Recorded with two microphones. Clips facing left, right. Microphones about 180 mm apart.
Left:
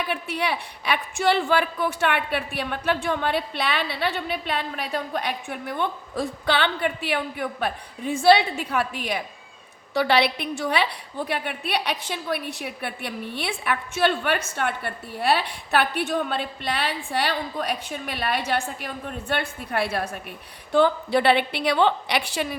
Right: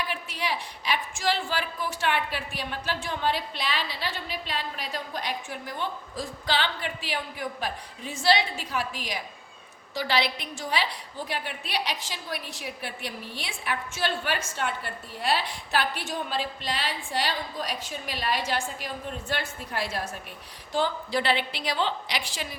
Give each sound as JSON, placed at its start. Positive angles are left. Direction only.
{"t": 0.1, "sound": "a woman's voice", "side_deg": 60}